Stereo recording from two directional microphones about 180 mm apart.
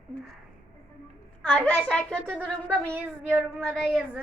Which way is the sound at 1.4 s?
5° left (ahead or behind).